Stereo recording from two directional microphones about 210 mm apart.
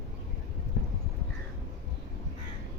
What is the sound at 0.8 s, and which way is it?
Clip-clop, 45° left (ahead or behind).